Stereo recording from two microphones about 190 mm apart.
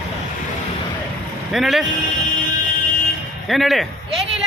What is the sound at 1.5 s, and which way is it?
Vehicle, centre (ahead or behind).